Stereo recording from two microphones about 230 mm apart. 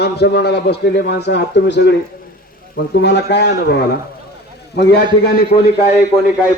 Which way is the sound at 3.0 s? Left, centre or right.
Left.